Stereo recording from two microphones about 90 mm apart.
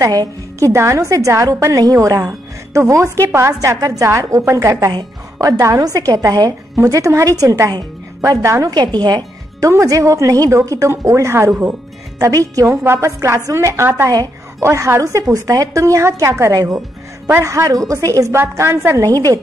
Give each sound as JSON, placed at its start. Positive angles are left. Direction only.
{"t": 0.0, "sound": "a woman's voice", "side_deg": -50}
{"t": 0.6, "sound": "a woman's voice", "side_deg": -35}
{"t": 8.7, "sound": "a woman's voice", "side_deg": -50}
{"t": 9.6, "sound": "a woman's voice", "side_deg": -35}
{"t": 16.5, "sound": "a woman's voice", "side_deg": -45}
{"t": 17.4, "sound": "a woman's voice", "side_deg": -35}
{"t": 18.4, "sound": "a woman's voice", "side_deg": -30}
{"t": 18.9, "sound": "a woman's voice", "side_deg": -40}